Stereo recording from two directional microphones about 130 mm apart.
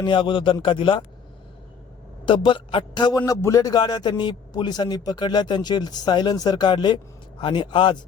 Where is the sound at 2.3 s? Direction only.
40° left (ahead or behind).